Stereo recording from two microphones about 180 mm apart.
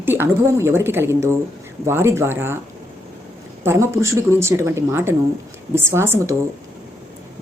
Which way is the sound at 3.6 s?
15° right (ahead or behind).